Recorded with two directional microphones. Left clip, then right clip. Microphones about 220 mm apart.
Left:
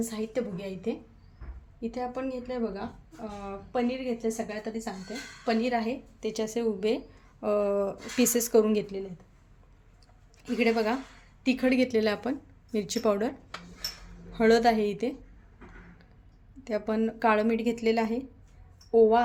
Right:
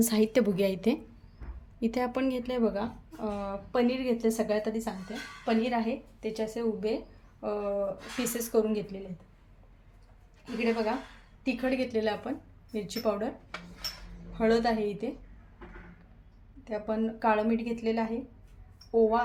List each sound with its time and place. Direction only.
0.0 s a woman's voice: 45° right (ahead or behind)
3.4 s speech: 25° right (ahead or behind)
5.5 s speech: 15° left (ahead or behind)
6.1 s a woman's voice: 30° left (ahead or behind)
10.6 s a woman's voice: 40° left (ahead or behind)
14.3 s a woman's voice: 40° left (ahead or behind)
16.6 s a woman's voice: 40° left (ahead or behind)